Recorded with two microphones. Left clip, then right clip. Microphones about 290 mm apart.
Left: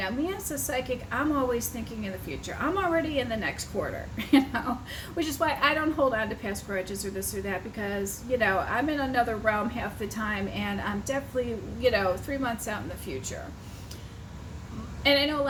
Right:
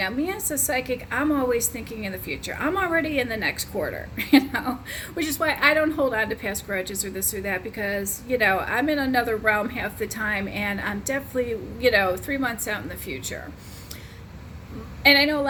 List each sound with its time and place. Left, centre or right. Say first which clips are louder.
0.0 s a woman's voice: right 4 dB; right
15.0 s a woman's voice: right 6 dB; right